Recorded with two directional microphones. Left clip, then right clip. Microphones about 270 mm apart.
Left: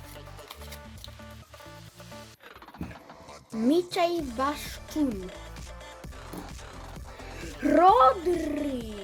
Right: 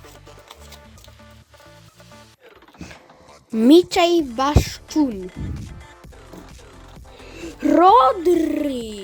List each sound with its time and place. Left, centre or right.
3.7 s speech: right
7.4 s speech: right